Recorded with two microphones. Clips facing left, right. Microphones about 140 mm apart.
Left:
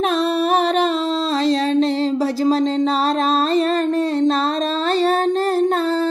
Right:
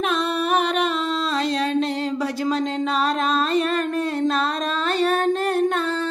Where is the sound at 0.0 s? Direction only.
35° left (ahead or behind).